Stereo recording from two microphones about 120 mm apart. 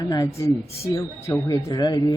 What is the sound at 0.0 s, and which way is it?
A woman's voice, 35° left (ahead or behind).